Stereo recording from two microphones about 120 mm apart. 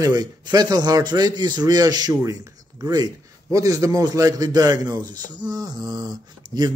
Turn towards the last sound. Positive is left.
turn(degrees=-35)  # may be behind; listen again after turning